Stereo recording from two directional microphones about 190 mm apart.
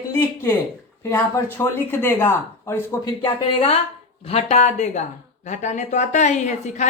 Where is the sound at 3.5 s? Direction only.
30° left (ahead or behind).